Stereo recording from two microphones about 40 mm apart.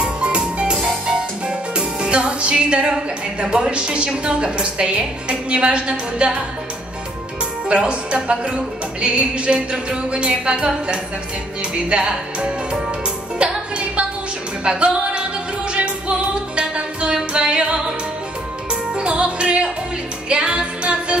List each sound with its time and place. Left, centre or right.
0.0 s music: right
1.8 s speech: right
7.6 s speech: right
11.7 s speech: right
14.6 s music: right
18.9 s music: right